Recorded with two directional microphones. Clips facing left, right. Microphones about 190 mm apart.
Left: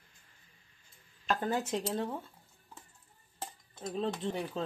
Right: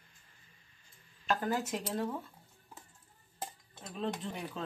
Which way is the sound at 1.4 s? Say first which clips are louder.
Left 2 dB; 25° left (ahead or behind).